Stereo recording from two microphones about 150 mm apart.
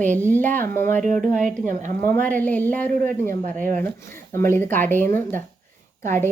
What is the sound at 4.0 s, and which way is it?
Speech, 15° left (ahead or behind).